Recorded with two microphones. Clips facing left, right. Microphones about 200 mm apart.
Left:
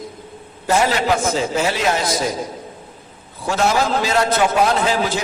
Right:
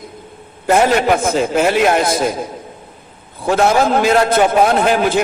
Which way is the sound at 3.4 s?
55° right (ahead or behind).